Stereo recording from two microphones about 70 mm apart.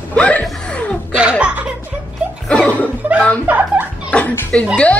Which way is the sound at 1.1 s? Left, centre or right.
Centre.